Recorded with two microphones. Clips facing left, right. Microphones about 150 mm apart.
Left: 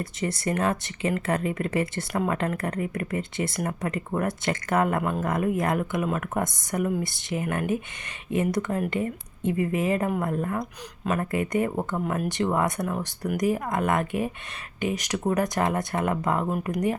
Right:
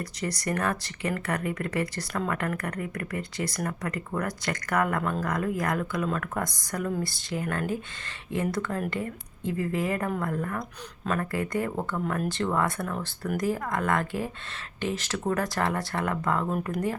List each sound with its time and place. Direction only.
0.0 s speech: 25° left (ahead or behind)